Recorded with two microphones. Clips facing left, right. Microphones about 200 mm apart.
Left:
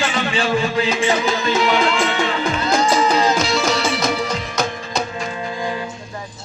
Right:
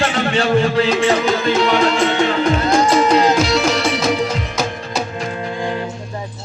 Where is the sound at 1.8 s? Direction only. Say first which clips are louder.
Right 4 dB; 35° right (ahead or behind).